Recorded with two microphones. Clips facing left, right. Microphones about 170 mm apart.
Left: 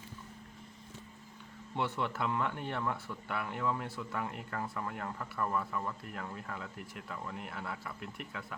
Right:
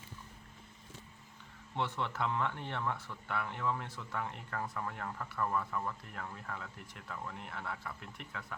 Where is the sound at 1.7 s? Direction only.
10° left (ahead or behind).